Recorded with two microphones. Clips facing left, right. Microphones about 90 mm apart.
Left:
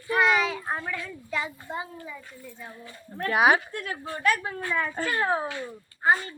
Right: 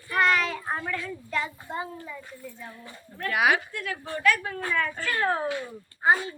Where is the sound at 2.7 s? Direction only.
30° left (ahead or behind).